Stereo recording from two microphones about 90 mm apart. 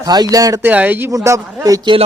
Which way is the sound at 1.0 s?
35° right (ahead or behind).